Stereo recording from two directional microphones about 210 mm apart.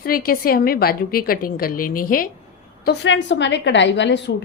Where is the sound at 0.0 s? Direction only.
45° left (ahead or behind).